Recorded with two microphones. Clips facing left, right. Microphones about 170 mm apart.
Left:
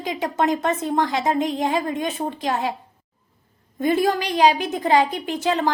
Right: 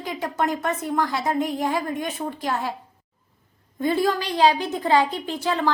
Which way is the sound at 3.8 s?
20° left (ahead or behind).